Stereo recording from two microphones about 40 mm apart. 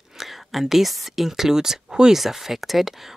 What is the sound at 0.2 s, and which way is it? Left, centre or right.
Speech, centre.